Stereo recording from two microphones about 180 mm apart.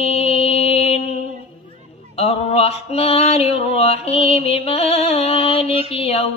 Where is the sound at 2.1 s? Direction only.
35° left (ahead or behind).